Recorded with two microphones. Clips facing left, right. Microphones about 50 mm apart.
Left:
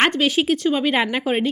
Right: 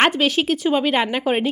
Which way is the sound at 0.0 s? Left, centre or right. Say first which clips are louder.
Right 1 dB; centre.